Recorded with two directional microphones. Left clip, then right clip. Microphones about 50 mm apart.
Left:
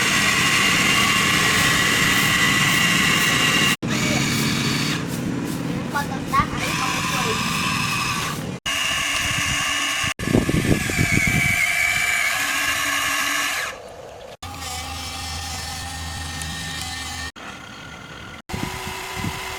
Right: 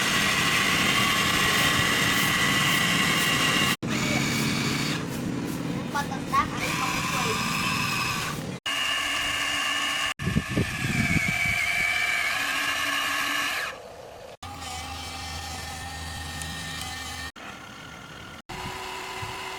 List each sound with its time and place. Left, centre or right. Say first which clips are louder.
0.0 s vehicle: left 5 dB; centre
5.9 s vehicle: left 4 dB; centre
6.6 s a sound: left 4 dB; centre